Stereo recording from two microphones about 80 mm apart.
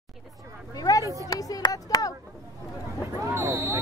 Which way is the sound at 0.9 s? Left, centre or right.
Left.